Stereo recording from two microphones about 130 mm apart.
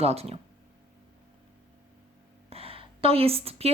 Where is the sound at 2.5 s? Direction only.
50° right (ahead or behind).